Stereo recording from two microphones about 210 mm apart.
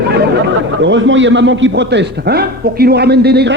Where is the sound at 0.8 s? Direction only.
60° right (ahead or behind).